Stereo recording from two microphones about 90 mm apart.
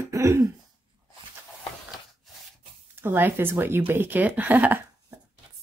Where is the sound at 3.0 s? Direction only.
25° right (ahead or behind).